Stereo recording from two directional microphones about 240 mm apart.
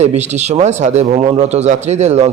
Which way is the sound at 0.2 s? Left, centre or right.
Right.